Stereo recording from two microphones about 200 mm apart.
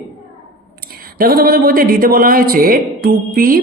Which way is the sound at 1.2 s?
50° right (ahead or behind).